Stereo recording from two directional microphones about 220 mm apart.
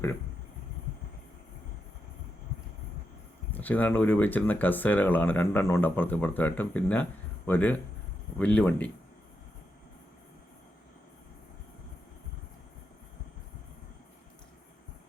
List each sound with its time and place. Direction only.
3.5 s speech: 10° left (ahead or behind)